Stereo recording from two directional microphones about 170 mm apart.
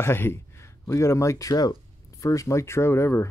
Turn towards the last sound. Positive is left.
turn(degrees=15)  # may be behind; listen again after turning